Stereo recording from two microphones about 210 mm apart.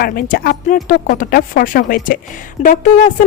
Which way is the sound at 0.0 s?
45° left (ahead or behind).